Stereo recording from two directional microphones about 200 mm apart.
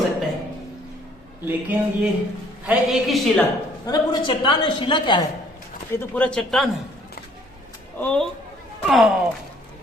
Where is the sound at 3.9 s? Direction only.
25° left (ahead or behind).